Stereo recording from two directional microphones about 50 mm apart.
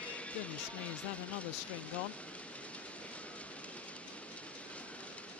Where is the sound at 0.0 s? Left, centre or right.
Left.